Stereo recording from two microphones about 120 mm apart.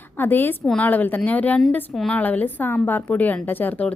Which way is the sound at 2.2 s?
15° left (ahead or behind).